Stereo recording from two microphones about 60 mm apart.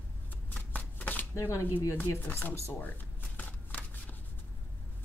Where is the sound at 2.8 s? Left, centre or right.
Left.